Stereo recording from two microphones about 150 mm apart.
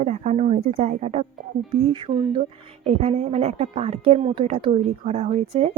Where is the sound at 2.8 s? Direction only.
45° right (ahead or behind).